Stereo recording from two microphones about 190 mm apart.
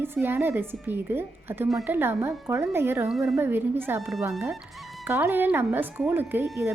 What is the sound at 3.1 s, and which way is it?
Speech, centre (ahead or behind).